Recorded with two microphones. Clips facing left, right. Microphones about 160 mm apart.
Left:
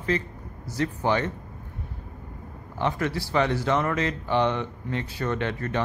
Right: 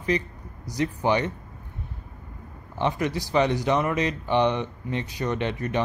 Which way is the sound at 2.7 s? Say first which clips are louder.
Right 1 dB; 20° right (ahead or behind).